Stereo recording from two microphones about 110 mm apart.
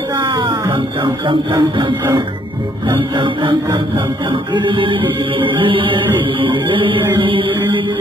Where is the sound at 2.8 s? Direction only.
50° right (ahead or behind).